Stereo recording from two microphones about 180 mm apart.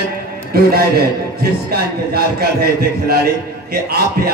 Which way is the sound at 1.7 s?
60° right (ahead or behind).